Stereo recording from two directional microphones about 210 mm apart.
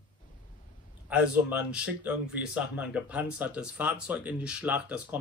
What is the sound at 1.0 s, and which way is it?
Speech, 5° right (ahead or behind).